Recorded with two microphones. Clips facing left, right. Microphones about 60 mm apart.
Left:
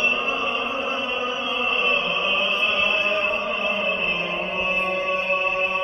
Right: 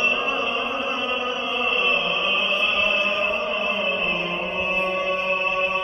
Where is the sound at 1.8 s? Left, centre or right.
Left.